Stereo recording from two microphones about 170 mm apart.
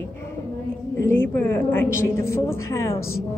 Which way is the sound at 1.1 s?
15° left (ahead or behind).